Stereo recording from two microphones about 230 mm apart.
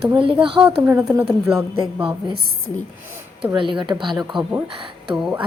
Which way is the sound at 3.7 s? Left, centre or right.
Centre.